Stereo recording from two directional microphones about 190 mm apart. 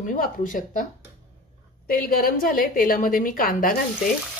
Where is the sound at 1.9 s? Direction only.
50° left (ahead or behind).